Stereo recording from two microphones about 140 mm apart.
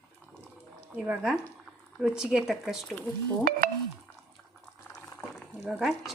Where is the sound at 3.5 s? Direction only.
90° right.